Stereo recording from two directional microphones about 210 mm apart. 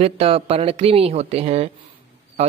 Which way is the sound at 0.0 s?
30° right (ahead or behind).